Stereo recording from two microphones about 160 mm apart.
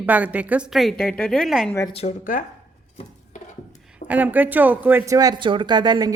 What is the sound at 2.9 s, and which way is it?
Stir, 50° left (ahead or behind).